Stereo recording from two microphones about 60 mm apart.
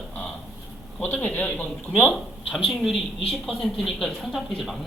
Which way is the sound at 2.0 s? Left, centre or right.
Centre.